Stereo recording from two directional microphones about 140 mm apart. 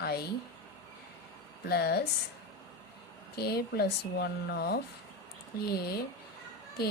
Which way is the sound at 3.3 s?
90° left.